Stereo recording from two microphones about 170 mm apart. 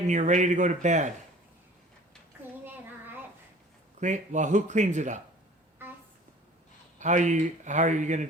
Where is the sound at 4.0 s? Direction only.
45° right (ahead or behind).